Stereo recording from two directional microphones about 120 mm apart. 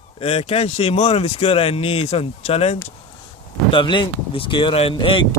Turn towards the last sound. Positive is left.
turn(degrees=45)  # may be behind; listen again after turning